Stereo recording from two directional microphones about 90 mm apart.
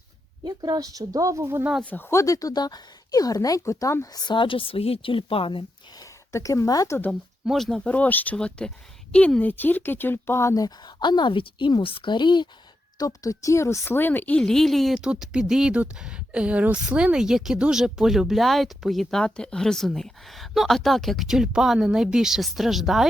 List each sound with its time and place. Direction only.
0.4 s speech: 45° right (ahead or behind)
1.8 s speech: 15° left (ahead or behind)
2.0 s speech: 35° left (ahead or behind)
4.4 s speech: 75° left (ahead or behind); by 5.6 s 90° left
6.3 s a woman's voice: 35° left (ahead or behind)
7.4 s speech: 5° left (ahead or behind)
7.9 s a woman's voice: 15° left (ahead or behind)
10.5 s speech: 40° left (ahead or behind)
11.0 s a woman's voice: 60° left (ahead or behind)
13.0 s a woman's voice: 40° left (ahead or behind); by 14.4 s 20° left (ahead or behind)
14.4 s speech: 5° left (ahead or behind)